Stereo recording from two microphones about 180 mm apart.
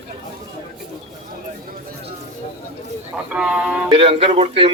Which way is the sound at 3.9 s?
30° right (ahead or behind).